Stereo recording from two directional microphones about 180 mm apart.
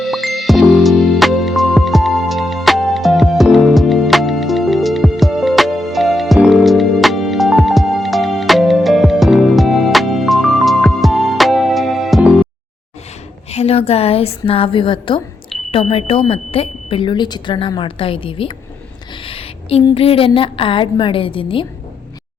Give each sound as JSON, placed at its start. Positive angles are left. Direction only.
{"t": 0.0, "sound": "music", "side_deg": 0}
{"t": 13.5, "sound": "a woman's voice", "side_deg": 35}